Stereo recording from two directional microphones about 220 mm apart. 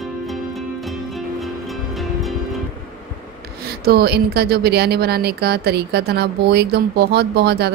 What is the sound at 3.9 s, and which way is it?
Speech, 45° right (ahead or behind).